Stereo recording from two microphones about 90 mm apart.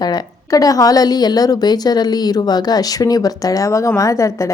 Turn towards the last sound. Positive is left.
turn(degrees=35)  # may be behind; listen again after turning